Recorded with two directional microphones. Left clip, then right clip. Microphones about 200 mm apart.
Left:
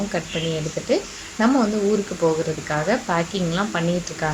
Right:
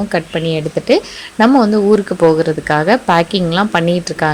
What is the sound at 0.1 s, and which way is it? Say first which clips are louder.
A woman's voice: right 10 dB; 45° right (ahead or behind).